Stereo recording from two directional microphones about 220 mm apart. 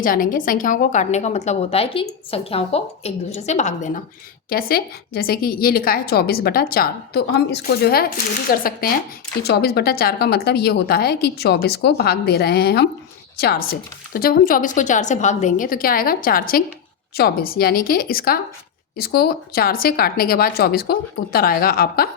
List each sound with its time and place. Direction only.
0.0 s a woman's voice: 40° left (ahead or behind)